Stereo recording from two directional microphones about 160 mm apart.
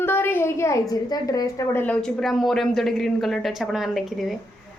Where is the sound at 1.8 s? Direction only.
5° left (ahead or behind).